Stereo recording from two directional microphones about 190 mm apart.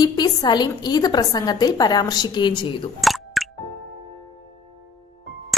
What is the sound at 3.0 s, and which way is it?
Squish, centre (ahead or behind).